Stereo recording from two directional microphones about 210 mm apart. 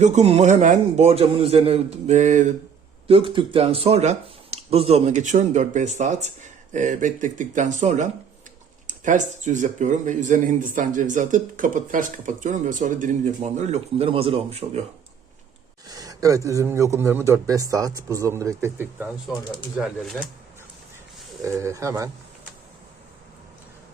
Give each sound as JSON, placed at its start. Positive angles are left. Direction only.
{"t": 0.0, "sound": "speech", "side_deg": -30}
{"t": 3.1, "sound": "speech", "side_deg": -25}
{"t": 15.9, "sound": "a man's voice", "side_deg": -15}
{"t": 21.4, "sound": "a man's voice", "side_deg": -15}